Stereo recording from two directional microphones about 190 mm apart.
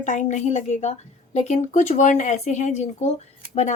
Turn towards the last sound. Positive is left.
turn(degrees=35)  # may be behind; listen again after turning